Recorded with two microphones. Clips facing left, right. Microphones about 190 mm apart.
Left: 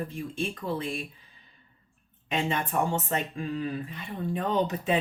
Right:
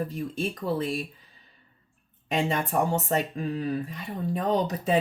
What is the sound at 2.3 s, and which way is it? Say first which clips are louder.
Speech: right 2 dB; 40° right (ahead or behind).